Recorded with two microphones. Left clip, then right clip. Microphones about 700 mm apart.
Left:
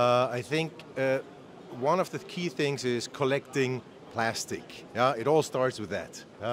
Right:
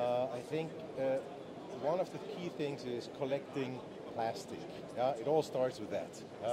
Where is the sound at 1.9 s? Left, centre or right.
Left.